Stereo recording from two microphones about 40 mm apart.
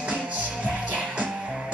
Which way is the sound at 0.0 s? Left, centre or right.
Right.